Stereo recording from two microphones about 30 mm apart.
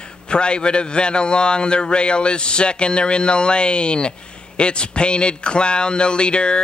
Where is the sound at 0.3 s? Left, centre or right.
Left.